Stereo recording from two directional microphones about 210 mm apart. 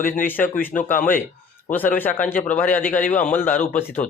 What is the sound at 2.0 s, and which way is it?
A man's voice, 10° left (ahead or behind).